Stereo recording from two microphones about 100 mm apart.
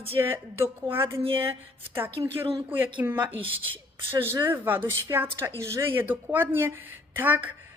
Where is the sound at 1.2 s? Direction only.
65° right (ahead or behind).